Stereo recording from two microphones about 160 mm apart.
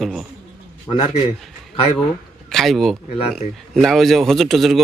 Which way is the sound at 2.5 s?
Centre (ahead or behind).